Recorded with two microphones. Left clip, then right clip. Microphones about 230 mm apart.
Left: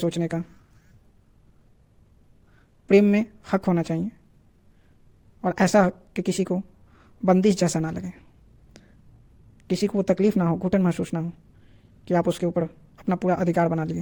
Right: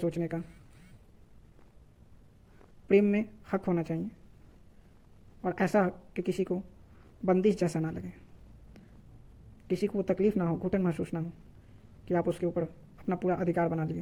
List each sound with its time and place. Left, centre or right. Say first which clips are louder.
0.0 s speech: left 6 dB; left
2.8 s speech: left 7 dB; left
5.4 s a woman's voice: left 8 dB; left
9.6 s speech: left 7 dB; left